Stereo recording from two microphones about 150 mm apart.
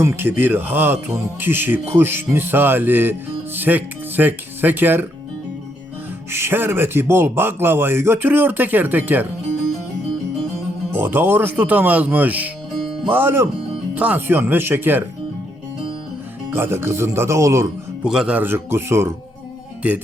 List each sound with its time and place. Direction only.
0.0 s speech: 15° right (ahead or behind)
6.3 s speech: 15° right (ahead or behind)
10.9 s speech: 15° right (ahead or behind)
16.5 s speech: 15° right (ahead or behind)
18.0 s speech: 5° right (ahead or behind)